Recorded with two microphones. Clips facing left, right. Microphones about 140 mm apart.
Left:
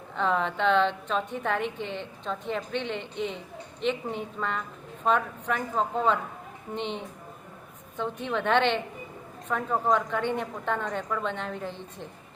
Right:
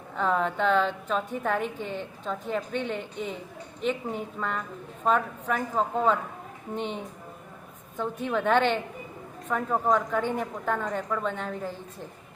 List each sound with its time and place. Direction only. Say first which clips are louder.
0.2 s a woman's voice: right 1 dB; 5° right (ahead or behind)
7.9 s a woman's voice: right 1 dB; 5° right (ahead or behind)